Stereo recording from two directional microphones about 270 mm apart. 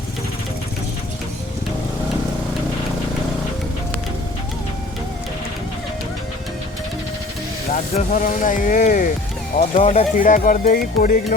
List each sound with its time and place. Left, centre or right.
7.7 s speech: left